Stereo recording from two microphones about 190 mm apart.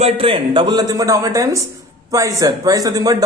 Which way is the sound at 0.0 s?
30° right (ahead or behind).